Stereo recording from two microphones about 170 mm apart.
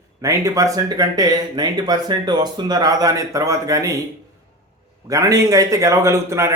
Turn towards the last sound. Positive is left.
turn(degrees=-15)  # may be behind; listen again after turning